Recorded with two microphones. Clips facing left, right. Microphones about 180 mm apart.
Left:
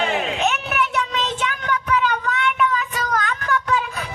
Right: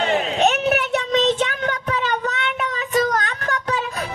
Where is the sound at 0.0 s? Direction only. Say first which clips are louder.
Right 3 dB; 35° right (ahead or behind).